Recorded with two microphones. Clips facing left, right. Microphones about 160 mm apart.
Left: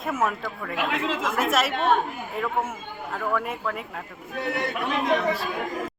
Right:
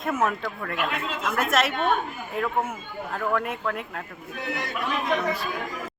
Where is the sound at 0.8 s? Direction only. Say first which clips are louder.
Left 4 dB; 90° left.